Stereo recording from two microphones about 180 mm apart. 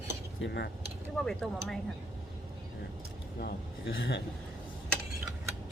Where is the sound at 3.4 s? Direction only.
90° left.